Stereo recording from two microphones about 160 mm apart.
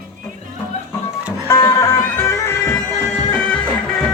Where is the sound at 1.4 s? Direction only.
20° left (ahead or behind).